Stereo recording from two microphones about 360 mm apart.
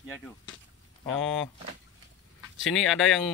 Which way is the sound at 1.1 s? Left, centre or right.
Centre.